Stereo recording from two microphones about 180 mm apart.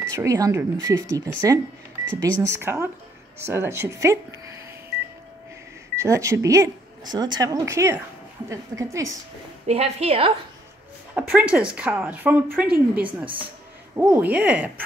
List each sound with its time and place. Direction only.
0.1 s speech: 15° right (ahead or behind)
5.9 s speech: 15° right (ahead or behind)
9.7 s a woman's voice: 35° right (ahead or behind)
11.1 s speech: 10° right (ahead or behind)